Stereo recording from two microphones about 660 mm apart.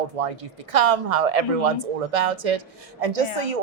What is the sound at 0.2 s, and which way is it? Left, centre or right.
Speech, right.